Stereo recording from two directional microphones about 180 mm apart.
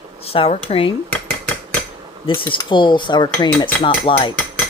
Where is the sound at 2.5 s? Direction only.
25° left (ahead or behind).